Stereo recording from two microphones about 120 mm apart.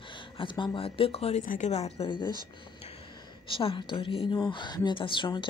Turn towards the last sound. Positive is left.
turn(degrees=45)  # may be behind; listen again after turning